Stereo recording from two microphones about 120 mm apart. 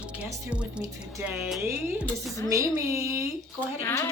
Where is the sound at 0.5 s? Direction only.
10° right (ahead or behind).